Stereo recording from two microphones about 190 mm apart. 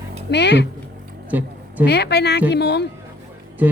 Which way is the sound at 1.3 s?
10° right (ahead or behind).